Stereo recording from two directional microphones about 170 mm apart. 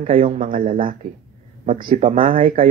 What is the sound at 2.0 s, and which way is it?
Speech, 40° right (ahead or behind).